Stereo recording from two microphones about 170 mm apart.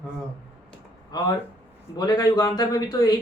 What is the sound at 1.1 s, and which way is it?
Speech, 25° left (ahead or behind).